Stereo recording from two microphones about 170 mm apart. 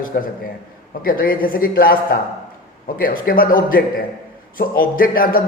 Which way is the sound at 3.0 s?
60° left (ahead or behind).